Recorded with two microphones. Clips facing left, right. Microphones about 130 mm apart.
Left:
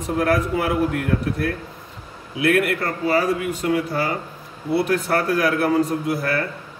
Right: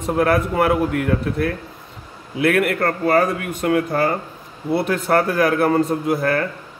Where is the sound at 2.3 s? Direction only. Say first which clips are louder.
Right 1 dB; 55° right (ahead or behind).